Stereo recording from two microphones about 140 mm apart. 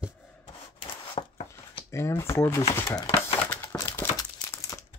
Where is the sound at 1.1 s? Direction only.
45° left (ahead or behind).